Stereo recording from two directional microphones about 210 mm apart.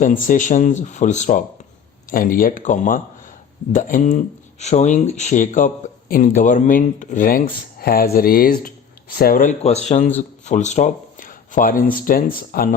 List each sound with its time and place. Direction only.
0.0 s speech: 40° left (ahead or behind)